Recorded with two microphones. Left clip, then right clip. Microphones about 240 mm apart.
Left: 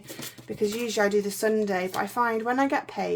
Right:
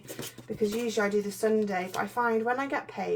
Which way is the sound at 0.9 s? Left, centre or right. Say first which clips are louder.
Left 4 dB; left.